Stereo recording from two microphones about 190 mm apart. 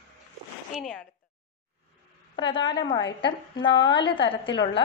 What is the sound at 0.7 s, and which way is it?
Speech, centre (ahead or behind).